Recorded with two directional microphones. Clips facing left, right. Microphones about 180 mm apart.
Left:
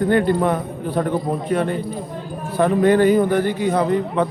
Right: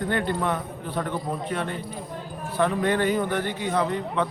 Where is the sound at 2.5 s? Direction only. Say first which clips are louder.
Left 8 dB; 45° left (ahead or behind).